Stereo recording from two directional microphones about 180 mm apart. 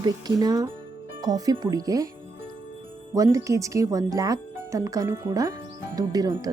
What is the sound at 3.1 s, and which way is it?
Speech, 20° right (ahead or behind).